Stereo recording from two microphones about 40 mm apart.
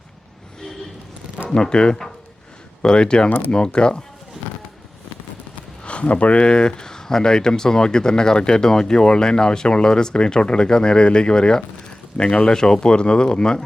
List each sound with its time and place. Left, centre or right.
1.5 s speech: left
5.8 s speech: left